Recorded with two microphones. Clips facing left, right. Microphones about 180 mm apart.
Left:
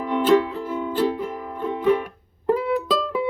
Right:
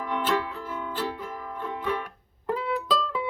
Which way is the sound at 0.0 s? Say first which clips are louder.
Left 9 dB; 20° left (ahead or behind).